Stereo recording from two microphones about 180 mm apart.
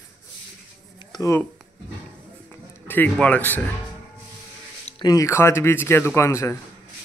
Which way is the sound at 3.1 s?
10° left (ahead or behind).